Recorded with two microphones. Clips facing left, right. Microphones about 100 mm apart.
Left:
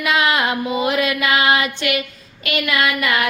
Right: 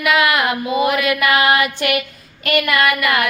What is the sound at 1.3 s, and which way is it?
Music, 45° right (ahead or behind).